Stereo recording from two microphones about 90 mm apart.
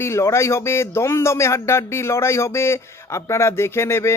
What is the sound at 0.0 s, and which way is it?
Speech, 30° left (ahead or behind).